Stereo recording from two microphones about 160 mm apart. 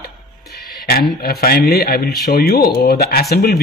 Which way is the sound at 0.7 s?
70° left (ahead or behind).